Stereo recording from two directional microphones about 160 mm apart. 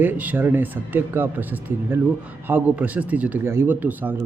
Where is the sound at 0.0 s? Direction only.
10° right (ahead or behind).